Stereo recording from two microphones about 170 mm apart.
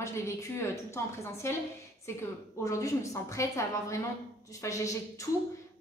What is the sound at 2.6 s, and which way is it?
A woman's voice, 20° left (ahead or behind).